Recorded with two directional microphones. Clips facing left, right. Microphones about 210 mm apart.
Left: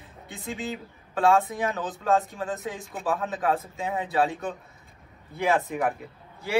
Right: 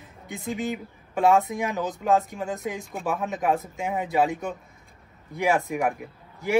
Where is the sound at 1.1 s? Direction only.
15° right (ahead or behind).